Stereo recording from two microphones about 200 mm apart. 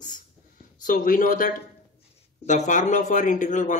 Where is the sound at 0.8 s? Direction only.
40° left (ahead or behind).